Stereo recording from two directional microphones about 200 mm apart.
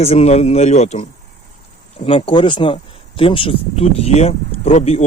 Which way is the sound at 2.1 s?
25° left (ahead or behind).